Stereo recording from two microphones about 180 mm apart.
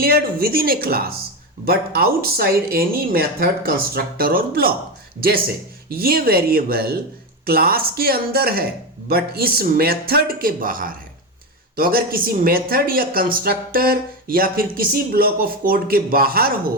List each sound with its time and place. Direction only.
0.0 s speech: 55° right (ahead or behind)
5.9 s speech: 55° right (ahead or behind)